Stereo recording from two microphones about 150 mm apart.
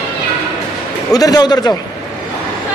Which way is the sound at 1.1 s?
25° left (ahead or behind).